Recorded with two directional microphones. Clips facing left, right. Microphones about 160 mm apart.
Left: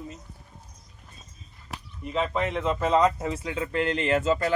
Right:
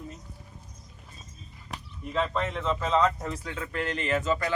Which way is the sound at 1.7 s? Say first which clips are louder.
Left 2 dB; 5° left (ahead or behind).